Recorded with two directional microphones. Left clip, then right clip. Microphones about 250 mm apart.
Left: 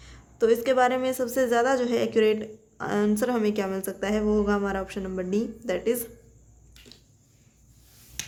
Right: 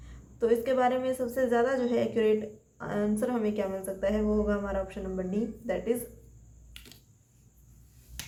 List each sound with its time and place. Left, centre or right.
0.0 s a woman's voice: left